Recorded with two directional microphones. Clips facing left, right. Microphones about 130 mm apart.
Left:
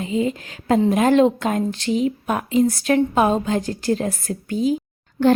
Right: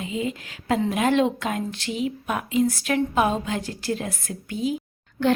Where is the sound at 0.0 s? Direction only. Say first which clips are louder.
Left 6 dB; 40° left (ahead or behind).